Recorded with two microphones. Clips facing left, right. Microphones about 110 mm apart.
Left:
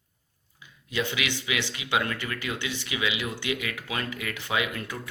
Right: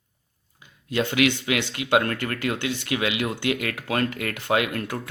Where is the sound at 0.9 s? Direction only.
55° right (ahead or behind).